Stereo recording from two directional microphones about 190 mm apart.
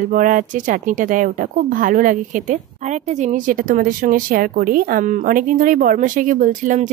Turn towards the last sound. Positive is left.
turn(degrees=-40)  # may be behind; listen again after turning